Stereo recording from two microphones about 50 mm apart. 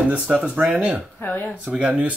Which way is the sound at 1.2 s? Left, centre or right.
Left.